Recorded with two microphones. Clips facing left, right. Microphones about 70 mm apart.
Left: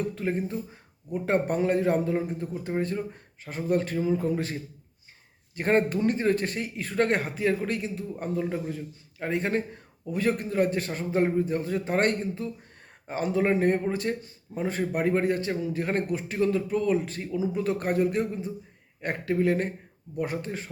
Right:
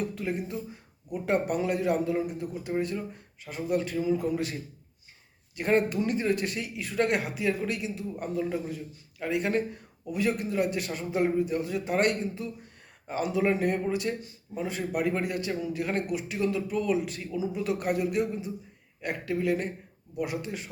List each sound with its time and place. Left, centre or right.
0.2 s speech: left
5.5 s speech: left